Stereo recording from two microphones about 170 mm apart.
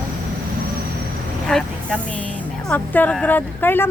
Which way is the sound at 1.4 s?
5° left (ahead or behind).